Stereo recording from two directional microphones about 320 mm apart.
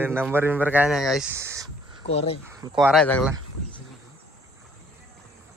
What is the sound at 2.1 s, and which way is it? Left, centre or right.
Speech, centre.